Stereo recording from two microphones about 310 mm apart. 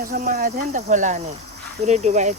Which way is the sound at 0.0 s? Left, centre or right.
Right.